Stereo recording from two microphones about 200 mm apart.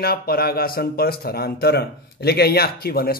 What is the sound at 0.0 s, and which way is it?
A man's voice, 50° left (ahead or behind).